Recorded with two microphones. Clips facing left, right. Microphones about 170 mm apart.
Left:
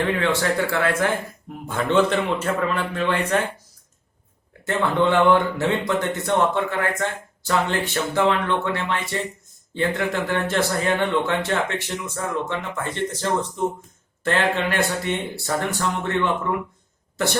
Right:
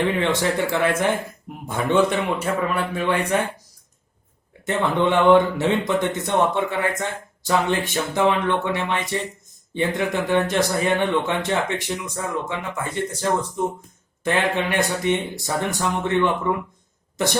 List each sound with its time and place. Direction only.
0.2 s speech: 20° right (ahead or behind)
4.6 s speech: 20° right (ahead or behind)